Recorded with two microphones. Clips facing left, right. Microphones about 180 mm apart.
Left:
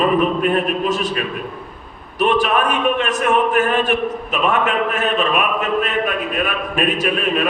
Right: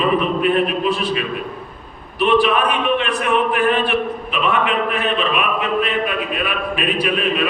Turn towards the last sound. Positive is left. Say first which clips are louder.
# even
turn(degrees=45)  # may be behind; listen again after turning